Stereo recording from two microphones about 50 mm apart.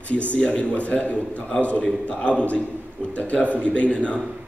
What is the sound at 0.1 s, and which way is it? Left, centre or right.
A man's voice, left.